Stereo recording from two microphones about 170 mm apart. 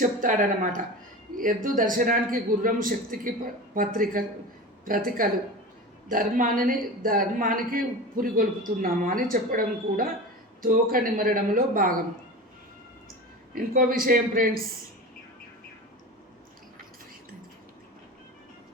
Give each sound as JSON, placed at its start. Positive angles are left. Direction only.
{"t": 0.0, "sound": "a man's voice", "side_deg": -50}
{"t": 13.5, "sound": "a man's voice", "side_deg": -60}